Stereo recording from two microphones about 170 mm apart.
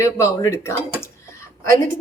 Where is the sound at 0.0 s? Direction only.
15° left (ahead or behind).